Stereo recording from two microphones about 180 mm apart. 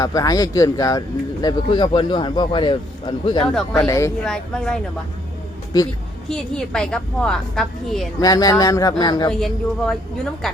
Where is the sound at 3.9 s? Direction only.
15° left (ahead or behind).